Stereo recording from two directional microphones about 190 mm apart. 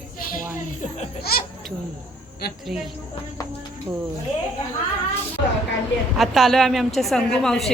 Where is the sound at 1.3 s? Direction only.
55° left (ahead or behind).